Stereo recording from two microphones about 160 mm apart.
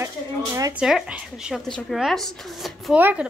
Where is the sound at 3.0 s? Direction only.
10° right (ahead or behind).